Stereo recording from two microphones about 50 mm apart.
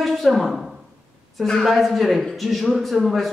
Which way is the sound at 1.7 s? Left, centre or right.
Centre.